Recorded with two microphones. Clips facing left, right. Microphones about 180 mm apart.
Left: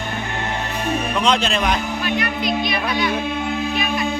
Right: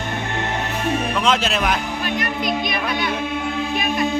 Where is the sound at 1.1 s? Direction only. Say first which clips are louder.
Left 3 dB; centre (ahead or behind).